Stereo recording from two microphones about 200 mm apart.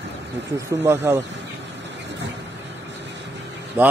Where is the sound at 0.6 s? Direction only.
15° right (ahead or behind).